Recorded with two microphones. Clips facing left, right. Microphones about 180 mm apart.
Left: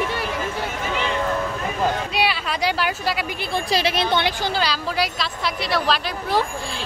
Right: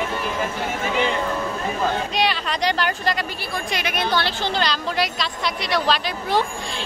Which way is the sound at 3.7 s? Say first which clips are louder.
Left 3 dB; 30° left (ahead or behind).